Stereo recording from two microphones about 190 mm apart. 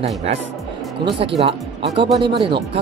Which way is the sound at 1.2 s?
30° right (ahead or behind).